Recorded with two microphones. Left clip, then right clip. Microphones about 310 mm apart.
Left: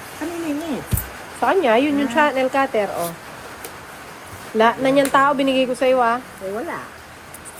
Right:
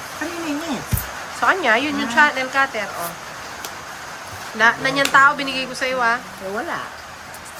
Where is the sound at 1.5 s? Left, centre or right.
Centre.